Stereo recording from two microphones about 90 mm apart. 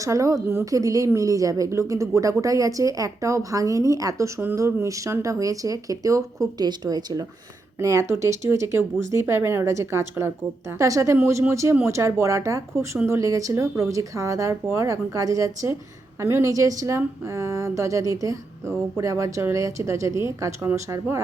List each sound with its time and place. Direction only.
0.0 s speech: 35° right (ahead or behind)
7.8 s speech: 35° right (ahead or behind)